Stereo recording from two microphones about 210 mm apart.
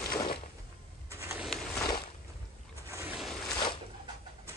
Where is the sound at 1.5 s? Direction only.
Centre (ahead or behind).